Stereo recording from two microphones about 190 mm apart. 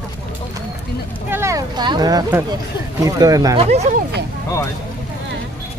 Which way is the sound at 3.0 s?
20° right (ahead or behind).